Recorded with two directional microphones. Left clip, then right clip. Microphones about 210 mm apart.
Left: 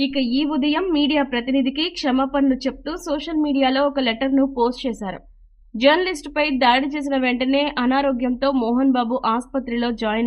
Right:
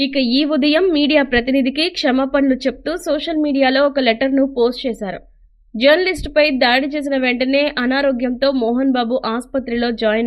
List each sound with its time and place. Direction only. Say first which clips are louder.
0.0 s a woman's voice: right 5 dB; 15° right (ahead or behind)